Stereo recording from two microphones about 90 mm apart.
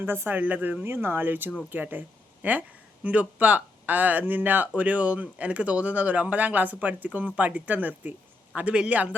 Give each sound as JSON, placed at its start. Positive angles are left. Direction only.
{"t": 0.0, "sound": "speech", "side_deg": -25}